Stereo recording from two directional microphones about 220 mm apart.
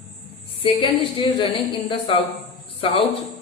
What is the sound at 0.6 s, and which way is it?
Speech, 25° left (ahead or behind).